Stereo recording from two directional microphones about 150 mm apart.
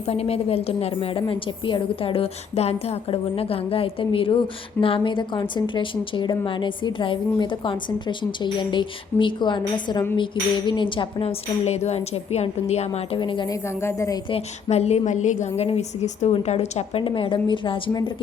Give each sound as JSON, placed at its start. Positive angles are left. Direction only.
{"t": 0.1, "sound": "a woman's voice", "side_deg": 40}
{"t": 13.1, "sound": "a woman's voice", "side_deg": 30}
{"t": 13.8, "sound": "a woman's voice", "side_deg": 20}
{"t": 14.3, "sound": "a woman's voice", "side_deg": 45}